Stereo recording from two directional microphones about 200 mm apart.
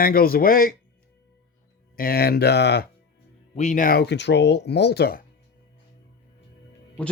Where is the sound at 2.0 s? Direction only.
50° left (ahead or behind).